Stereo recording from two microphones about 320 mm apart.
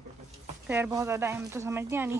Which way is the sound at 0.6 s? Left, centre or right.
Centre.